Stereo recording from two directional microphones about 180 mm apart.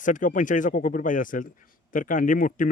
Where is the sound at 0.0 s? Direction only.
45° left (ahead or behind).